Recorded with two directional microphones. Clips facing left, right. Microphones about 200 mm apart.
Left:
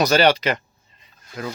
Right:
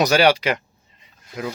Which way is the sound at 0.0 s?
10° right (ahead or behind).